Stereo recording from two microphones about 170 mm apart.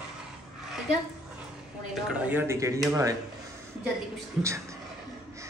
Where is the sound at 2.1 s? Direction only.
15° right (ahead or behind).